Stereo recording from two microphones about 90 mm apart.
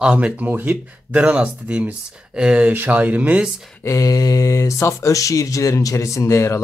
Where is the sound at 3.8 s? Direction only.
40° left (ahead or behind).